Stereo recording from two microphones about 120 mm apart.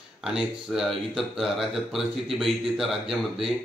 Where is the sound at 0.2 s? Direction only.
5° right (ahead or behind).